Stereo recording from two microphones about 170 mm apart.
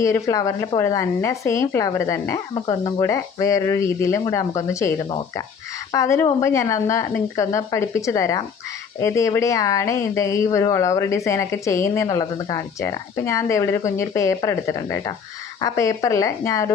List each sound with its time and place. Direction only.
0.0 s speech: 20° left (ahead or behind)